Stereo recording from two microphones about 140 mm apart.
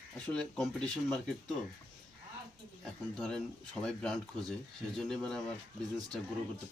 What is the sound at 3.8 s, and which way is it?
Speech, 5° left (ahead or behind).